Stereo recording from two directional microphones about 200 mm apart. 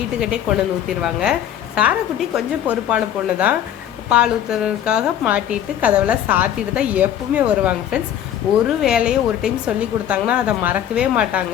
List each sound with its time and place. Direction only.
0.9 s a woman's voice: centre (ahead or behind)